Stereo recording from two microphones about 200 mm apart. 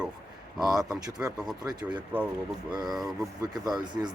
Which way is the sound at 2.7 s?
20° right (ahead or behind).